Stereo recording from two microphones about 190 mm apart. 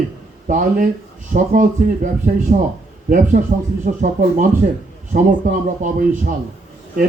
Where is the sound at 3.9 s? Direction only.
40° right (ahead or behind).